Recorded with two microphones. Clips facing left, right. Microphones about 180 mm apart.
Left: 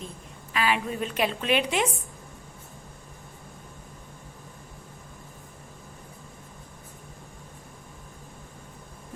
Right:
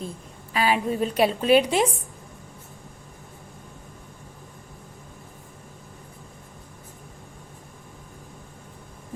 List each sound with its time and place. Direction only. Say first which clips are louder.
0.5 s a woman's voice: right 4 dB; 35° right (ahead or behind)